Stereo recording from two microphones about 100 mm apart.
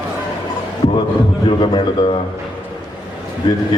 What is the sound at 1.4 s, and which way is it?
Speech, 55° left (ahead or behind).